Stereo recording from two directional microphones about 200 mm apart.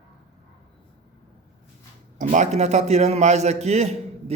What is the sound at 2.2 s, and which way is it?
A man's voice, 35° right (ahead or behind).